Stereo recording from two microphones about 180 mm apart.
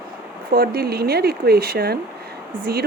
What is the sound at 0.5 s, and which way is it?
Speech, 55° right (ahead or behind).